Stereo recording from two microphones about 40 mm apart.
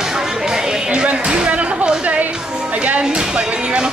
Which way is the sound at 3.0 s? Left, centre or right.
Centre.